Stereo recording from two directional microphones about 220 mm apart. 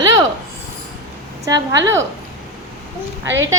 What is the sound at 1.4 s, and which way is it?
Speech, 15° right (ahead or behind).